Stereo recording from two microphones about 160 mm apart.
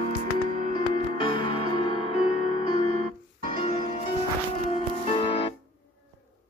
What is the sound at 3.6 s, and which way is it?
Music, 40° left (ahead or behind).